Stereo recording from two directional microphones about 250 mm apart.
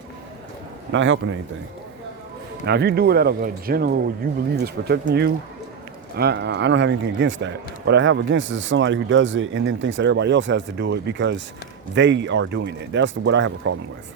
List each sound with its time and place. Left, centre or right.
0.9 s a man's voice: right
2.6 s a man's voice: right